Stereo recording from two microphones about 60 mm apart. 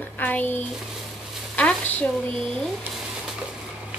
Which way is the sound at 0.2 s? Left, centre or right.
Left.